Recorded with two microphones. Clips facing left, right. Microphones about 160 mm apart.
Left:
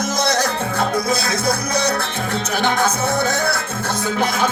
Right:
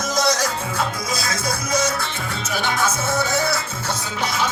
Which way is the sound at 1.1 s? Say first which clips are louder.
Left 5 dB; 60° left (ahead or behind).